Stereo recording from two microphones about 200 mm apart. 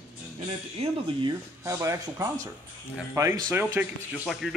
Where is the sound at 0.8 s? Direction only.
30° right (ahead or behind).